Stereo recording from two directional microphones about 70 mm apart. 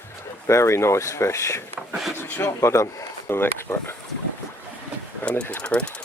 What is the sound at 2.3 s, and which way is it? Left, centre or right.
Speech, left.